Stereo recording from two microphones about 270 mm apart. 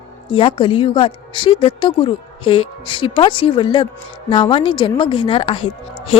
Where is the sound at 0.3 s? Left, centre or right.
Centre.